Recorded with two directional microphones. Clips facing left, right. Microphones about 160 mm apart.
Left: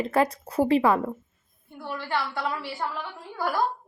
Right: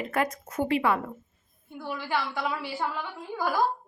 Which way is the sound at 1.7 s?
10° right (ahead or behind).